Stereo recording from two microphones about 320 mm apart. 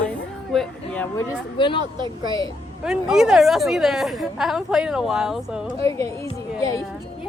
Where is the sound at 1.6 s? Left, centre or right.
Centre.